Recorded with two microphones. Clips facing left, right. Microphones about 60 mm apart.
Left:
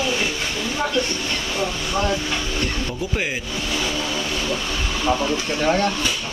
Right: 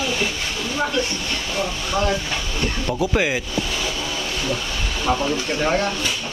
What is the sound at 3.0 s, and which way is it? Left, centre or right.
Speech, right.